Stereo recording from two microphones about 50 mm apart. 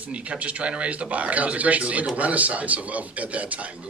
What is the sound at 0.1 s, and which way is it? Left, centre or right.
A man's voice, right.